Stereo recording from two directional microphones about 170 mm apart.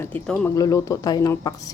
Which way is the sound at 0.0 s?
10° left (ahead or behind).